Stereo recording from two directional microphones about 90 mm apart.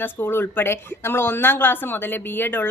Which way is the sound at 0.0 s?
25° left (ahead or behind).